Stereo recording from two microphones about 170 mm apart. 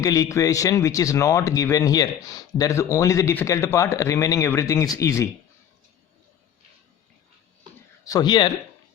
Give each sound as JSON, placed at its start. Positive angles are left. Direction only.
{"t": 0.0, "sound": "speech", "side_deg": 20}
{"t": 8.0, "sound": "speech", "side_deg": 25}